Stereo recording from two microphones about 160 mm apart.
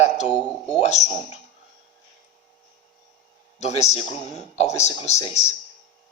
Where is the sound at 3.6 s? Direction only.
45° left (ahead or behind).